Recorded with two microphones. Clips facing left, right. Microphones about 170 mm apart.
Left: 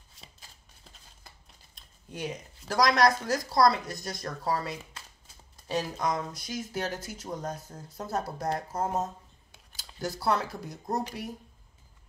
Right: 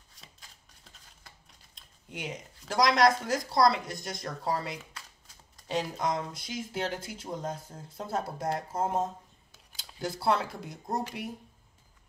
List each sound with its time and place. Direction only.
2.0 s speech: 20° right (ahead or behind)